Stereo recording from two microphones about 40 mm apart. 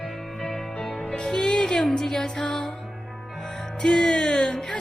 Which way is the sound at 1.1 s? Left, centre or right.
Centre.